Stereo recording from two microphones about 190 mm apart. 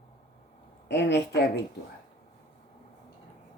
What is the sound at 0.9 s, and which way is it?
Speech, 65° left (ahead or behind).